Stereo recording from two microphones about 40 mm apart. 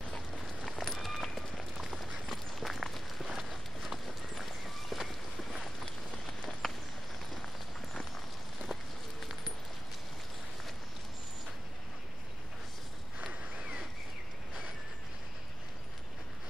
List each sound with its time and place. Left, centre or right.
0.4 s run: centre
1.8 s a sound: centre
2.2 s run: centre
3.3 s clip-clop: centre
6.6 s walk: centre
13.2 s a sound: right